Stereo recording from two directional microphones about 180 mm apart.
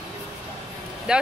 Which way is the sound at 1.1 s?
5° right (ahead or behind).